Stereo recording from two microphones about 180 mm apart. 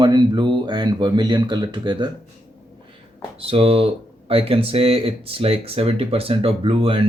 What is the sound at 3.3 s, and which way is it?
Speech, 30° right (ahead or behind).